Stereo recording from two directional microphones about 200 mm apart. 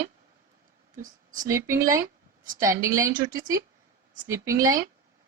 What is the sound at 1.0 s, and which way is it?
Speech, 40° right (ahead or behind).